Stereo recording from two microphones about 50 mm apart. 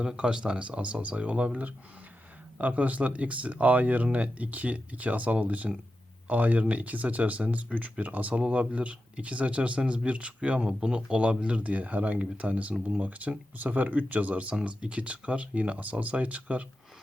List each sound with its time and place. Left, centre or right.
0.0 s speech: centre